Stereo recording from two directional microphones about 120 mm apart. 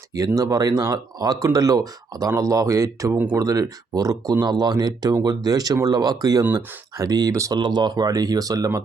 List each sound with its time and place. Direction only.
0.1 s speech: 30° right (ahead or behind)